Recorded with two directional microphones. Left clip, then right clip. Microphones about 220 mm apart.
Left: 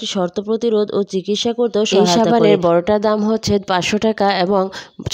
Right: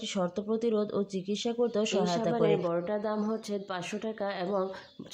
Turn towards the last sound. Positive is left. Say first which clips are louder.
# left 16 dB
turn(degrees=45)  # may be behind; listen again after turning